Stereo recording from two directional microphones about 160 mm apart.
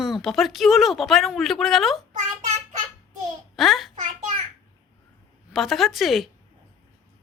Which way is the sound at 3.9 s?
45° right (ahead or behind).